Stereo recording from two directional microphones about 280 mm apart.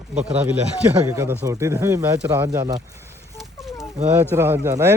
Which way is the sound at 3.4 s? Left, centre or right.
Centre.